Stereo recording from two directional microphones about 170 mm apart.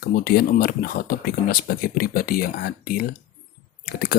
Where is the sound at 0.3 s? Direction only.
60° left (ahead or behind).